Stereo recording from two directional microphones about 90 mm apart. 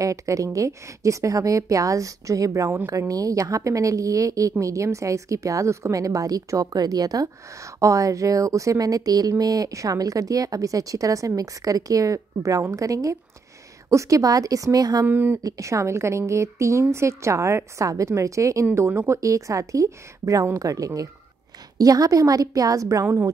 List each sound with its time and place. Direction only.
0.0 s a woman's voice: 40° right (ahead or behind)
15.0 s speech: 20° right (ahead or behind)
15.4 s a woman's voice: 35° right (ahead or behind)